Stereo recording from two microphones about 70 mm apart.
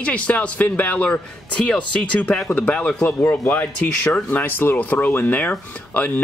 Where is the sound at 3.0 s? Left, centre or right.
Left.